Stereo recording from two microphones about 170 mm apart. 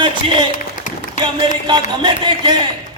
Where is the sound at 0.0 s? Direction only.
30° right (ahead or behind).